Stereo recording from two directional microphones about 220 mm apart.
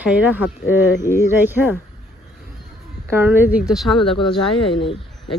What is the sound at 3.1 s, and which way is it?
Speech, 10° right (ahead or behind).